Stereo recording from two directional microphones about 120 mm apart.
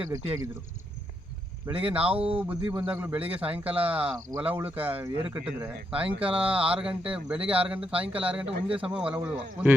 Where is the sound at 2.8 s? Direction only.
15° right (ahead or behind).